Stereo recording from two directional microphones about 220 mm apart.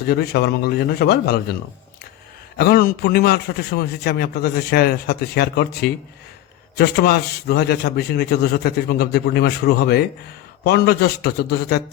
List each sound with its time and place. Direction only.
0.0 s a man's voice: 45° left (ahead or behind)
2.6 s a man's voice: 45° left (ahead or behind)